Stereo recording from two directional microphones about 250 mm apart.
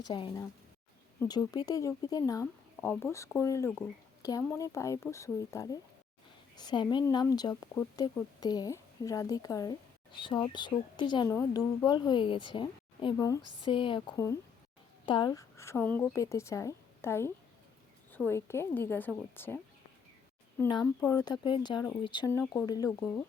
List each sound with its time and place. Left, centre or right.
0.0 s speech: centre
20.6 s speech: centre